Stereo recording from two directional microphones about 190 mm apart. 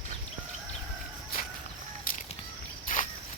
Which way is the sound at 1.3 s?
50° left (ahead or behind).